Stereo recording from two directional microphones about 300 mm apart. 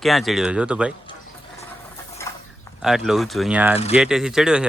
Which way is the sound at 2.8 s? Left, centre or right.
Centre.